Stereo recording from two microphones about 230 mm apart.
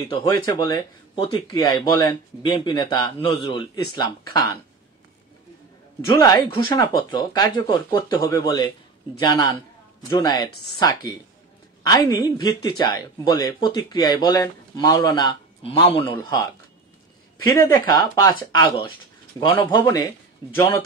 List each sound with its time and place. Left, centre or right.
0.1 s speech: centre
5.9 s speech: centre
17.5 s speech: centre